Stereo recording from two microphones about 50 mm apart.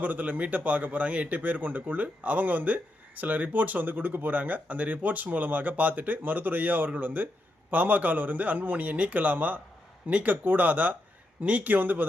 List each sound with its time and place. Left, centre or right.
0.0 s speech: right